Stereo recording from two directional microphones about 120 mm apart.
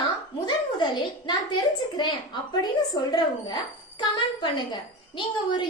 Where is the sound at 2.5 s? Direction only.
35° left (ahead or behind).